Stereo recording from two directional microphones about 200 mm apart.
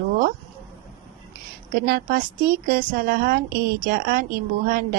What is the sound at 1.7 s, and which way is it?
A woman's voice, 50° right (ahead or behind).